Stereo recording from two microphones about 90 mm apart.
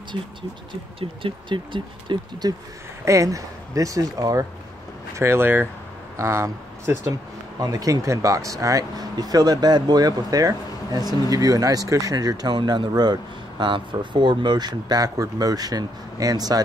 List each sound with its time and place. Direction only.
0.9 s speech: 70° right (ahead or behind)
3.1 s speech: 35° right (ahead or behind)
5.1 s speech: 30° right (ahead or behind); by 16.6 s 45° right (ahead or behind)